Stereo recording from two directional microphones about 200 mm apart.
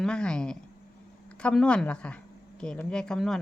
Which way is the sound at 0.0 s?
5° left (ahead or behind).